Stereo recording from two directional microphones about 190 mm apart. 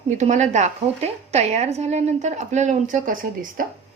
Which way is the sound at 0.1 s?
40° right (ahead or behind).